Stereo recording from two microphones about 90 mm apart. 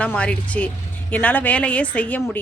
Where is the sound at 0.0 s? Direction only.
15° left (ahead or behind).